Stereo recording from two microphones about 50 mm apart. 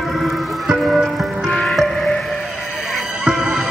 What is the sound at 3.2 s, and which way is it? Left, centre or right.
Music, centre.